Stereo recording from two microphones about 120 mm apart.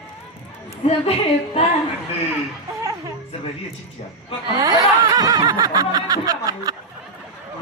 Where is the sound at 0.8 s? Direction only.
55° left (ahead or behind).